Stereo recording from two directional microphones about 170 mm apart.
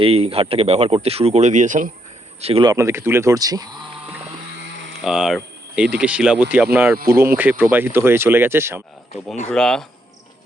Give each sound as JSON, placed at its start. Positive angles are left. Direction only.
{"t": 0.0, "sound": "speech", "side_deg": -35}
{"t": 2.4, "sound": "speech", "side_deg": -35}
{"t": 2.6, "sound": "speech", "side_deg": -15}
{"t": 5.0, "sound": "speech", "side_deg": 0}
{"t": 9.5, "sound": "speech", "side_deg": 5}